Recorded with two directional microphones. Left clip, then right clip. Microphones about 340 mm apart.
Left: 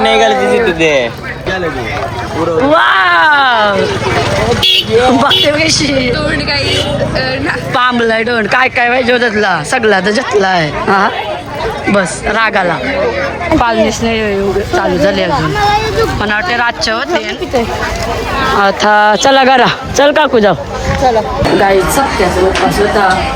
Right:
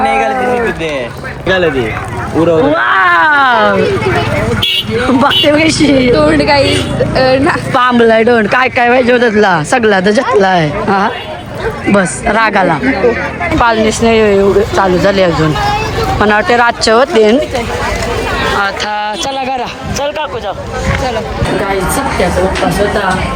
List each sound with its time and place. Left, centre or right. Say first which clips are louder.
0.8 s a man's voice: left 7 dB; left
2.7 s speech: left 1 dB; centre
5.0 s speech: even; centre
6.1 s speech: right 6 dB; centre
7.7 s speech: right 2 dB; centre
18.6 s a man's voice: left 6 dB; left